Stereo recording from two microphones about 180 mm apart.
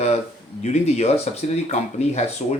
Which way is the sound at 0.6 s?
35° left (ahead or behind).